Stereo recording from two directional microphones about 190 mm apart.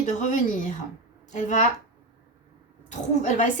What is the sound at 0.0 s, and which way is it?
A woman's voice, 40° left (ahead or behind).